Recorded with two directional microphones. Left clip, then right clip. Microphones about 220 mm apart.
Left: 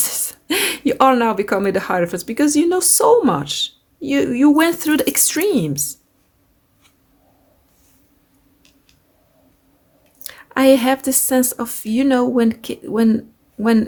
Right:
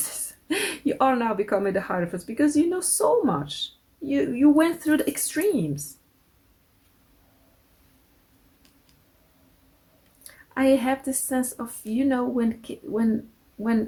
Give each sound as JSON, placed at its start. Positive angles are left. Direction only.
{"t": 0.1, "sound": "speech", "side_deg": 35}
{"t": 10.2, "sound": "speech", "side_deg": 40}